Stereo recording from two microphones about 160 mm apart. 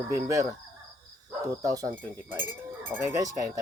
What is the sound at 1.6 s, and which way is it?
Speech, 20° right (ahead or behind).